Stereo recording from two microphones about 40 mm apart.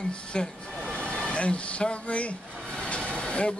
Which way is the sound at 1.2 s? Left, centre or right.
Left.